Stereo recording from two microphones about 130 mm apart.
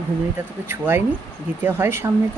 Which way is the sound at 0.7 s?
15° right (ahead or behind).